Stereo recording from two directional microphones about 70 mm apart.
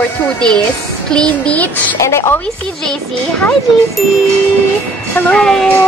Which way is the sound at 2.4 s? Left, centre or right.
Centre.